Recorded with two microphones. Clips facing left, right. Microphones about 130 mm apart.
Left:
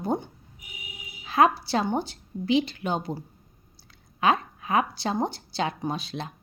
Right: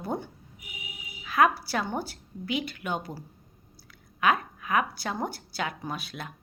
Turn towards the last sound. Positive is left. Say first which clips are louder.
# left 5 dB
turn(degrees=25)  # may be behind; listen again after turning